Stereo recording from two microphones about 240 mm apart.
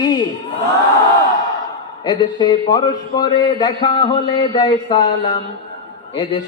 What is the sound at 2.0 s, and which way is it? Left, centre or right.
Speech, centre.